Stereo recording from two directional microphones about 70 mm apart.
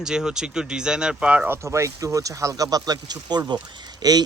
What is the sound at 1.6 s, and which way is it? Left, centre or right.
Speech, right.